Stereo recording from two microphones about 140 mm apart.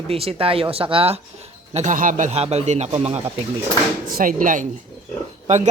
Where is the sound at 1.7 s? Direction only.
60° right (ahead or behind).